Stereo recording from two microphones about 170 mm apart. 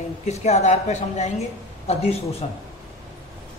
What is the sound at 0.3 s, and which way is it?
A woman's voice, 40° left (ahead or behind).